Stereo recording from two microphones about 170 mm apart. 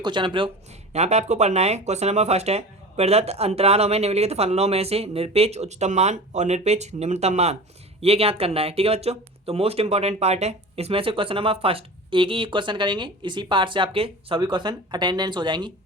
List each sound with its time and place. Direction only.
0.0 s speech: 30° right (ahead or behind)
0.9 s speech: 40° right (ahead or behind); by 15.7 s 25° right (ahead or behind)